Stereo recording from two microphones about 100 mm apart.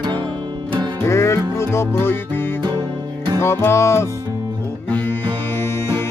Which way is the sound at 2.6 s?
50° right (ahead or behind).